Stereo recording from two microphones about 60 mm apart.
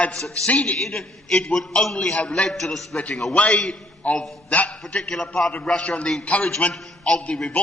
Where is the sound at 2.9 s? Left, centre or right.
Left.